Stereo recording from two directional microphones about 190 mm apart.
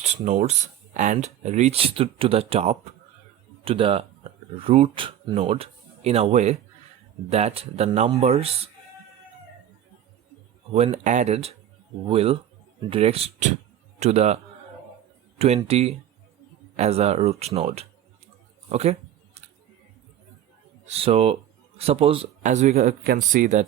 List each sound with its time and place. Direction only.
0.0 s speech: 35° right (ahead or behind)
10.8 s speech: 35° right (ahead or behind)
18.7 s a sound: 35° right (ahead or behind)
20.8 s speech: 30° right (ahead or behind)
23.0 s speech: 45° right (ahead or behind)